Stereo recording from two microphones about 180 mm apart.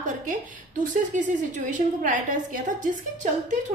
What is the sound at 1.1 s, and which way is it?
A woman's voice, 45° right (ahead or behind).